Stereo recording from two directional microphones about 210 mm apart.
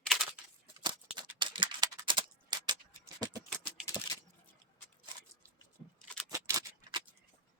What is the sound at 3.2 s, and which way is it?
Typing, 20° right (ahead or behind).